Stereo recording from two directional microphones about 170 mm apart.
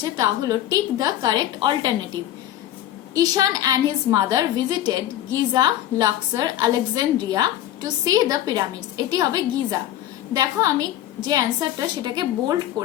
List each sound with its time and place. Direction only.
0.0 s a woman's voice: 20° right (ahead or behind)
3.2 s a woman's voice: 20° right (ahead or behind)
12.8 s speech: 5° left (ahead or behind)